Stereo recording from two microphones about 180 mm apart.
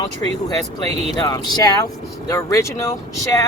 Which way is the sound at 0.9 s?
35° right (ahead or behind).